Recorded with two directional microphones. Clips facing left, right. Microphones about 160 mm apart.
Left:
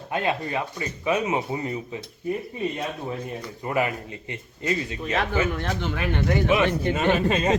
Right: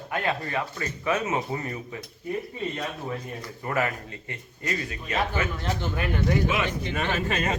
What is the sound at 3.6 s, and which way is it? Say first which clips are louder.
Speech: left 2 dB; 15° left (ahead or behind).